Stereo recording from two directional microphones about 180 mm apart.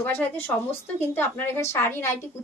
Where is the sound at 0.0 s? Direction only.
10° left (ahead or behind).